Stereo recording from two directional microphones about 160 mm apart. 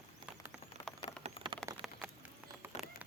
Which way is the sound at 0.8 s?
25° left (ahead or behind).